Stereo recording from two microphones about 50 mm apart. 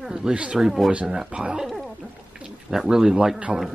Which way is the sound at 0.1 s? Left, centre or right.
Centre.